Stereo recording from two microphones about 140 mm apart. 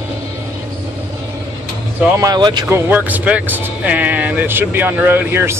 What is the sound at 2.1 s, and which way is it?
Speech, 30° right (ahead or behind).